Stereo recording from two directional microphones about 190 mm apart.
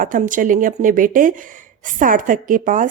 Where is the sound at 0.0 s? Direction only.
45° right (ahead or behind).